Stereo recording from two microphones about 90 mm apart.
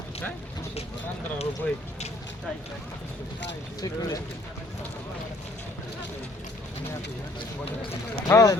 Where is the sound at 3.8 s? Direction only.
40° left (ahead or behind).